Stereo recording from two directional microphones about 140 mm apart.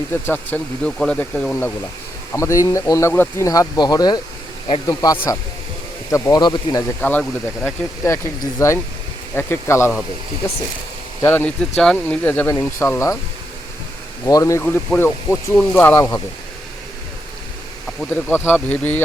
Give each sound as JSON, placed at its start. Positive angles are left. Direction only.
{"t": 0.1, "sound": "speech", "side_deg": 15}
{"t": 2.3, "sound": "speech", "side_deg": 20}
{"t": 7.0, "sound": "speech", "side_deg": 15}
{"t": 11.2, "sound": "speech", "side_deg": 15}
{"t": 14.3, "sound": "speech", "side_deg": 25}
{"t": 14.6, "sound": "speech", "side_deg": 10}
{"t": 18.3, "sound": "speech", "side_deg": 15}